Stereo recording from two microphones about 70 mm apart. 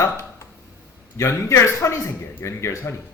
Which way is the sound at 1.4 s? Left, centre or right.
Left.